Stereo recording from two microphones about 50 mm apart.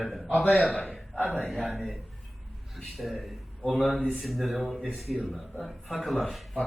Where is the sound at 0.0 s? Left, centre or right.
Centre.